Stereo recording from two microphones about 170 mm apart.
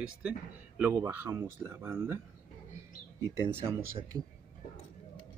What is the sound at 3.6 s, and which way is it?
Speech, 15° right (ahead or behind).